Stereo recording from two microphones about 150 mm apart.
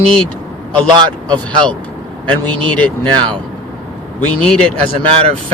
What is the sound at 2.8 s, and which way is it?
Speech, 10° left (ahead or behind).